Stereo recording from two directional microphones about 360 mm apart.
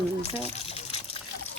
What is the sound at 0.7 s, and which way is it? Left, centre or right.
Water, centre.